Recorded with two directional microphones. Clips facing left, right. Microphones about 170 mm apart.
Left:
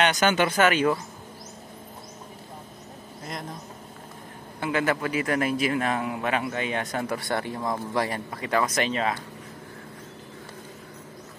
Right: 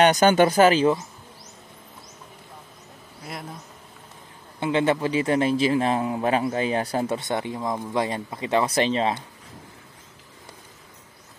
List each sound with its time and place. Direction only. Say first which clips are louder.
0.0 s speech: right 6 dB; 40° right (ahead or behind)
4.6 s a man's voice: right 4 dB; 25° right (ahead or behind)